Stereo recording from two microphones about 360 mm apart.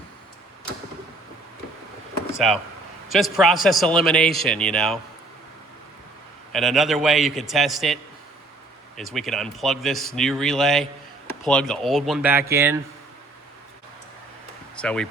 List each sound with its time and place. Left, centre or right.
2.3 s a man's voice: centre
6.5 s a man's voice: centre
9.0 s a man's voice: centre
14.8 s speech: centre